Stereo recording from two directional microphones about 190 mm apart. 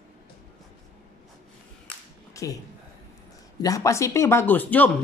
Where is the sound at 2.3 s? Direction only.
15° left (ahead or behind).